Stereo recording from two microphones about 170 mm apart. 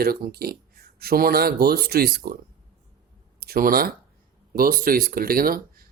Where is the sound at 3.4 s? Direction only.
60° right (ahead or behind).